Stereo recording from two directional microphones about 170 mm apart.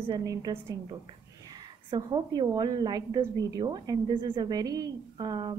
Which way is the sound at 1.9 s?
25° right (ahead or behind).